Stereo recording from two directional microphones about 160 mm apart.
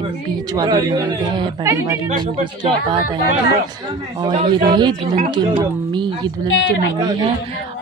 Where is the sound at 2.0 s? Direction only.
45° right (ahead or behind).